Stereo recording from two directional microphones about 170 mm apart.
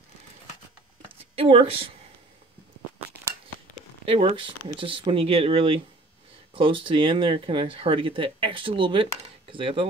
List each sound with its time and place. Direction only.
1.3 s speech: 35° right (ahead or behind)
4.0 s speech: 30° right (ahead or behind)